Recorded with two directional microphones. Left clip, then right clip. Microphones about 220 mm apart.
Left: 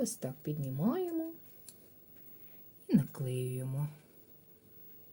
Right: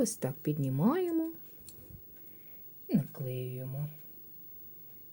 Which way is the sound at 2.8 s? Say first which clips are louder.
Left 1 dB; 15° left (ahead or behind).